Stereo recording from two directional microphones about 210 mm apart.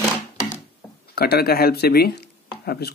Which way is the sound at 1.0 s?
50° left (ahead or behind).